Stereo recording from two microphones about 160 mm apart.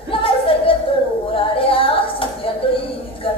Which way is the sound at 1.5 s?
35° left (ahead or behind).